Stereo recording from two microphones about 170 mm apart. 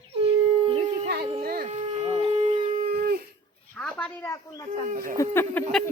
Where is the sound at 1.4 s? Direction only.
55° right (ahead or behind).